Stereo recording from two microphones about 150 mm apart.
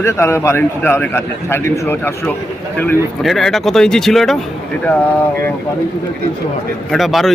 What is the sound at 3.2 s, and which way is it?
A man's voice, centre (ahead or behind).